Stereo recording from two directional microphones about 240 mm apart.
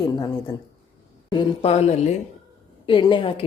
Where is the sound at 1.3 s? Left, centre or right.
Left.